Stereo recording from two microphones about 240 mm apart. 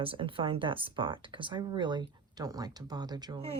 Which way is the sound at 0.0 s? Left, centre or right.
Right.